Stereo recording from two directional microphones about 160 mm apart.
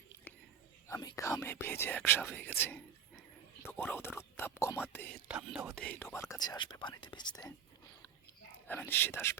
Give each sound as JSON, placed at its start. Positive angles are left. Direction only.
{"t": 0.9, "sound": "speech", "side_deg": 20}
{"t": 8.5, "sound": "speech", "side_deg": 10}